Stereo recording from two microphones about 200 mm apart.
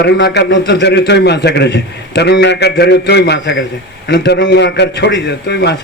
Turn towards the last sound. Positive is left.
turn(degrees=55)  # may be behind; listen again after turning